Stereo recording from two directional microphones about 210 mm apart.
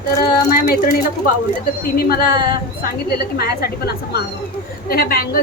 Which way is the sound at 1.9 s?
45° left (ahead or behind).